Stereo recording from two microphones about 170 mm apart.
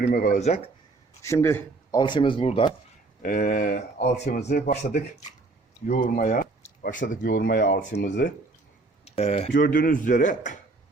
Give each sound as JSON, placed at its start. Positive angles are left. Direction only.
{"t": 0.0, "sound": "a man's voice", "side_deg": 55}
{"t": 1.2, "sound": "speech", "side_deg": 15}
{"t": 2.0, "sound": "speech", "side_deg": 25}
{"t": 3.2, "sound": "speech", "side_deg": 60}
{"t": 4.2, "sound": "a man's voice", "side_deg": 40}
{"t": 4.4, "sound": "speech", "side_deg": 70}
{"t": 5.9, "sound": "speech", "side_deg": 45}
{"t": 7.1, "sound": "speech", "side_deg": 50}
{"t": 7.9, "sound": "speech", "side_deg": 90}
{"t": 9.0, "sound": "speech", "side_deg": 35}
{"t": 9.5, "sound": "a man's voice", "side_deg": 55}